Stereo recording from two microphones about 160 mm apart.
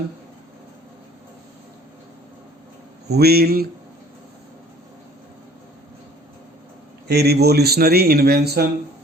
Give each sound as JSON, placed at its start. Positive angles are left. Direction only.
{"t": 3.1, "sound": "speech", "side_deg": -80}
{"t": 7.1, "sound": "speech", "side_deg": -85}